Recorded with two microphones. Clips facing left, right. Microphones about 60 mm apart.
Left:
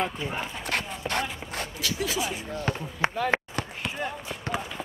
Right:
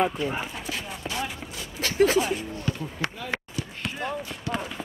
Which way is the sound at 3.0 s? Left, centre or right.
Left.